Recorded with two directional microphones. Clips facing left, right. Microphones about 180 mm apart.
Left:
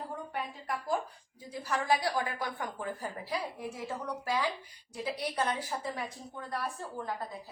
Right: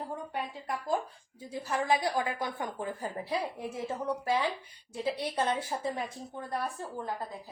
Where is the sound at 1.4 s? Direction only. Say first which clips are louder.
Right 2 dB; 20° right (ahead or behind).